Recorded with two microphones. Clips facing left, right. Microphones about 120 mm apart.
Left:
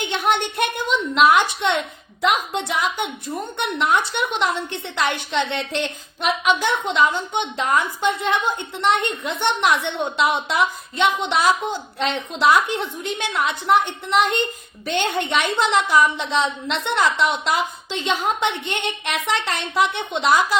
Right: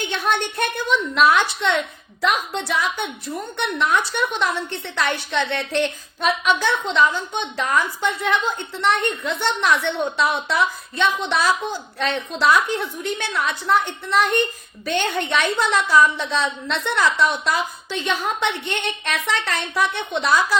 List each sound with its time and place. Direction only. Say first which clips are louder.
0.0 s a woman's voice: left 1 dB; 15° left (ahead or behind)